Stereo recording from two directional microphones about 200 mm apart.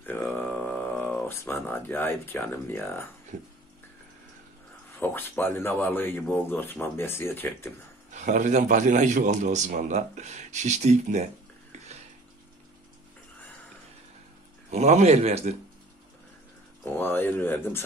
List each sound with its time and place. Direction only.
0.0 s a sound: 10° left (ahead or behind)
5.0 s speech: 10° left (ahead or behind)
8.1 s a man's voice: 40° right (ahead or behind)
14.7 s a man's voice: 35° right (ahead or behind)
16.8 s speech: 10° left (ahead or behind)